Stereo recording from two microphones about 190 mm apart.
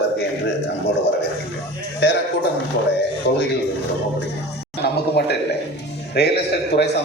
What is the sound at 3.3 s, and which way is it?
Speech, 60° left (ahead or behind).